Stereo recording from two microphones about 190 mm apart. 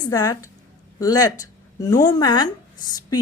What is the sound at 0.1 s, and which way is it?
A woman's voice, 20° left (ahead or behind).